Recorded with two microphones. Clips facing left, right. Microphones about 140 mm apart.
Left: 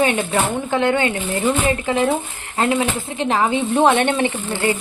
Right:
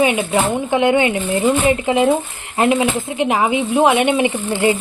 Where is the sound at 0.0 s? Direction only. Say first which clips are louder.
Right 2 dB; 10° right (ahead or behind).